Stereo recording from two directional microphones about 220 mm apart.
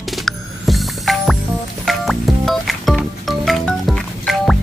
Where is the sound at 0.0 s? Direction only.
Centre (ahead or behind).